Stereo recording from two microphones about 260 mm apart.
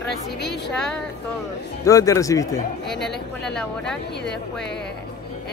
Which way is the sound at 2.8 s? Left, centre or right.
Centre.